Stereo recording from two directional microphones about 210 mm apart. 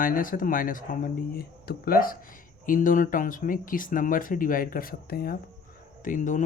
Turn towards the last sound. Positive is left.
turn(degrees=40)  # may be behind; listen again after turning